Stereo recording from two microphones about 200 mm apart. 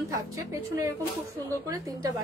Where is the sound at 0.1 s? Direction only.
15° right (ahead or behind).